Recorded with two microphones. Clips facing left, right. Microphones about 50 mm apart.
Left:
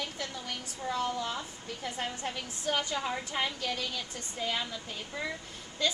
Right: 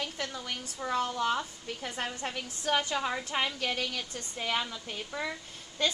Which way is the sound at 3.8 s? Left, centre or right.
Right.